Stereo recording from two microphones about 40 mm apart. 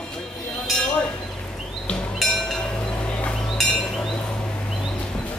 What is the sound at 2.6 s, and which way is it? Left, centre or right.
Chink, left.